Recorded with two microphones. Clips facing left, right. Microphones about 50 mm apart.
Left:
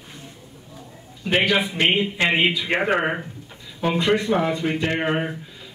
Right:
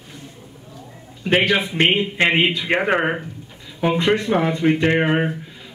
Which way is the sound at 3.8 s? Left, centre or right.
Right.